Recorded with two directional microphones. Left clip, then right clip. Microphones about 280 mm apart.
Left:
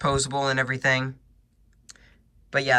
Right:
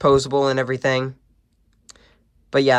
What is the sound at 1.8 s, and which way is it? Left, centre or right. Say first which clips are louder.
Clicking: right 2 dB; centre.